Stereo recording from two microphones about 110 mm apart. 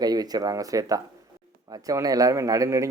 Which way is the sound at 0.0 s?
35° right (ahead or behind).